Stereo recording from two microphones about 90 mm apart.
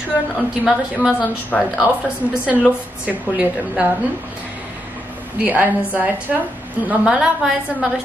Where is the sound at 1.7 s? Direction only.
10° right (ahead or behind).